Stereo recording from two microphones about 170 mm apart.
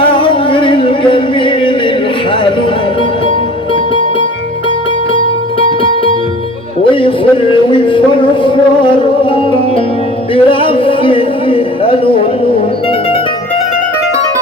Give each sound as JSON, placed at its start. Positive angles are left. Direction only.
{"t": 0.1, "sound": "music", "side_deg": 30}
{"t": 6.9, "sound": "music", "side_deg": 30}
{"t": 10.3, "sound": "a sound", "side_deg": 30}